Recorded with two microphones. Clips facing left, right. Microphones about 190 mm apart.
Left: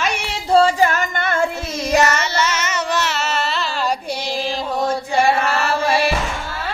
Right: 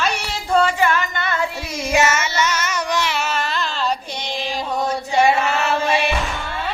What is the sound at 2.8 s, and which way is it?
Baby cry, 15° right (ahead or behind).